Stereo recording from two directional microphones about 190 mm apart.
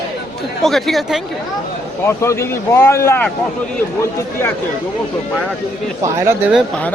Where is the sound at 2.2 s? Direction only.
15° left (ahead or behind).